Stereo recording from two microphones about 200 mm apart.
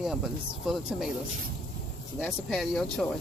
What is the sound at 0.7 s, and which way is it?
Speech, centre (ahead or behind).